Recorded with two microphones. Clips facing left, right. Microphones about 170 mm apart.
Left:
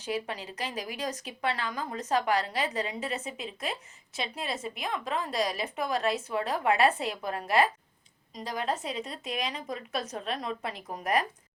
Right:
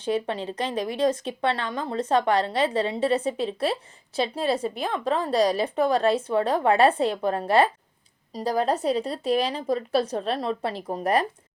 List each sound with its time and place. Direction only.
0.0 s speech: 30° right (ahead or behind)